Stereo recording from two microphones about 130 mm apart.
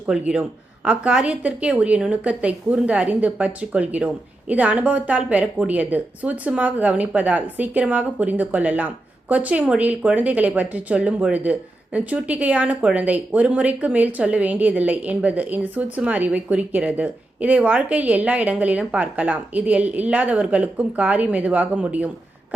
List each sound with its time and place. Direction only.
0.0 s speech: 5° right (ahead or behind)